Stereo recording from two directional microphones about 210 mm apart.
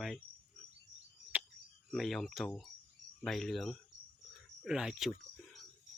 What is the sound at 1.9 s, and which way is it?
Speech, centre (ahead or behind).